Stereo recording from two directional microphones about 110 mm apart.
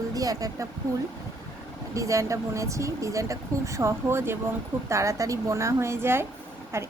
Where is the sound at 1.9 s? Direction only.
30° right (ahead or behind).